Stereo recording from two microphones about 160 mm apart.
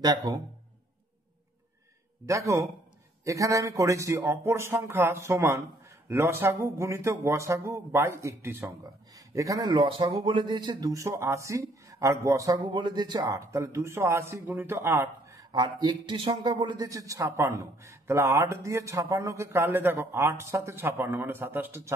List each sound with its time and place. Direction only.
0.0 s speech: 25° right (ahead or behind)
2.2 s speech: 20° right (ahead or behind)
15.5 s speech: 25° right (ahead or behind)